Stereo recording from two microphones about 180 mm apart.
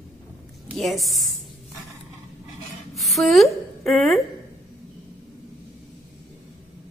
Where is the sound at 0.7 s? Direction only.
Centre (ahead or behind).